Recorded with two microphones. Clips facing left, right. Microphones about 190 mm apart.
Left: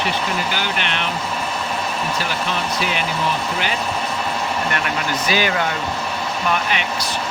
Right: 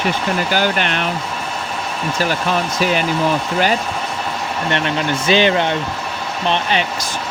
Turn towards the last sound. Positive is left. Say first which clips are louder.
# right 3 dB
turn(degrees=-30)  # may be behind; listen again after turning